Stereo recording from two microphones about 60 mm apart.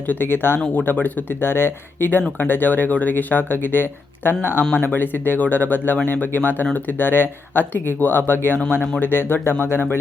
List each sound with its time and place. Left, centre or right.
0.1 s speech: left